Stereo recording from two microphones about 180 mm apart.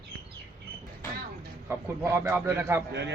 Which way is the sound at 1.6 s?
15° right (ahead or behind).